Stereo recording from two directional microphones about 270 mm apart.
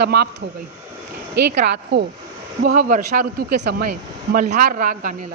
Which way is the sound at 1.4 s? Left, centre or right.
Right.